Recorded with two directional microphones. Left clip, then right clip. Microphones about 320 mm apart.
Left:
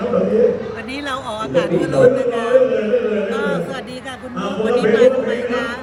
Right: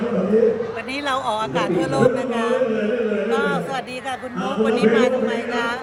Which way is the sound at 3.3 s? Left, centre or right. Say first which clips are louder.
Even; centre.